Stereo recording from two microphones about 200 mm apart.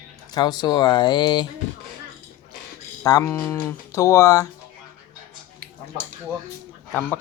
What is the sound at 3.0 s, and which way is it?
Speech, 15° left (ahead or behind).